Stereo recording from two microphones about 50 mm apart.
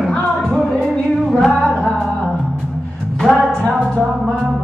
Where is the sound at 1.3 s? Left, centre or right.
Centre.